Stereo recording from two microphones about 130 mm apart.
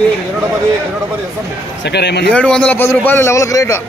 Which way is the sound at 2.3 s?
10° left (ahead or behind).